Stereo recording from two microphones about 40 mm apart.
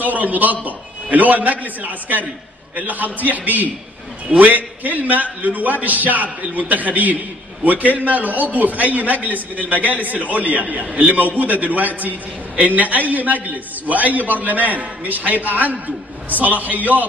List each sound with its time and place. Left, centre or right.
0.0 s a man's voice: right